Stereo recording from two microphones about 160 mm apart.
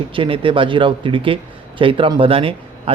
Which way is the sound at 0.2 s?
35° right (ahead or behind).